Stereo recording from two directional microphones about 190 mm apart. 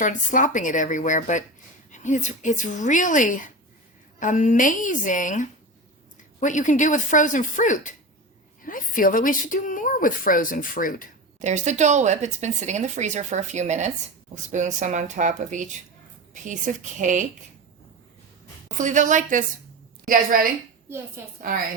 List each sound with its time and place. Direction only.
0.0 s a woman's voice: 45° left (ahead or behind)
11.3 s speech: 40° right (ahead or behind)
18.8 s speech: 40° right (ahead or behind)